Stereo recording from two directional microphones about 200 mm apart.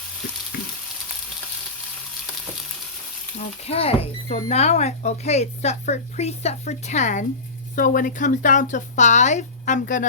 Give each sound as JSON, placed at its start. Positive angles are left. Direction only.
{"t": 3.3, "sound": "speech", "side_deg": 30}